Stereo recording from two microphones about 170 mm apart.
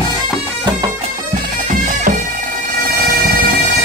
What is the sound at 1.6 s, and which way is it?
Bagpipes, 50° right (ahead or behind).